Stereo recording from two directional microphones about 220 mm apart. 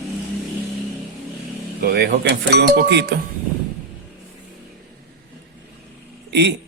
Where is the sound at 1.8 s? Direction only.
45° right (ahead or behind).